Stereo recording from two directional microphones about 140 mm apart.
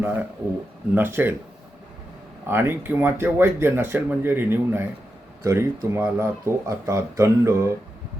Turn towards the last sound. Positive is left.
turn(degrees=-20)  # may be behind; listen again after turning